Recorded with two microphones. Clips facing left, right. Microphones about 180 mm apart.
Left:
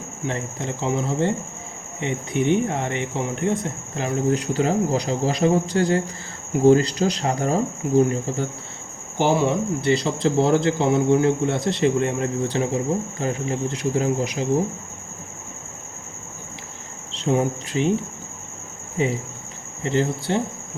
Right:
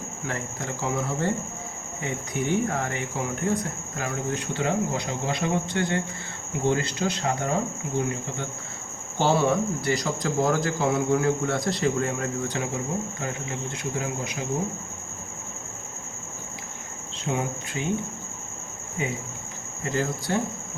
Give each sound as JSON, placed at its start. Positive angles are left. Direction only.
{"t": 0.3, "sound": "speech", "side_deg": 20}
{"t": 9.1, "sound": "speech", "side_deg": 15}
{"t": 17.3, "sound": "speech", "side_deg": 30}
{"t": 18.9, "sound": "speech", "side_deg": 30}